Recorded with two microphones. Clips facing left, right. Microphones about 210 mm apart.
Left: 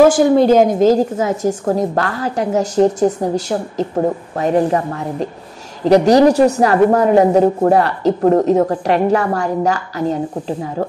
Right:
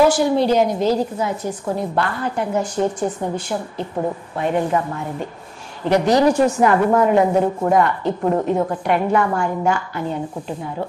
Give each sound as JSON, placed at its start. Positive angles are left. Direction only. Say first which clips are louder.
{"t": 0.0, "sound": "a woman's voice", "louder": "left 5 dB", "side_deg": 50}